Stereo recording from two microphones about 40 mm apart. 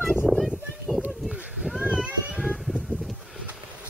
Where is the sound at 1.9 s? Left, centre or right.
Right.